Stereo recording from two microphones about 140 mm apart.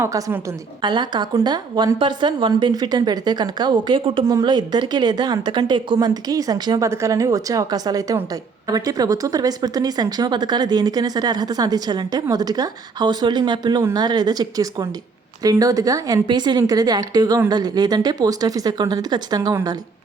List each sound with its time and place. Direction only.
0.0 s speech: 20° right (ahead or behind)
0.8 s a woman's voice: 30° right (ahead or behind)